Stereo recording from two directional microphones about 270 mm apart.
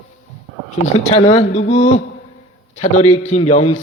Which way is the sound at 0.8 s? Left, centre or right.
Left.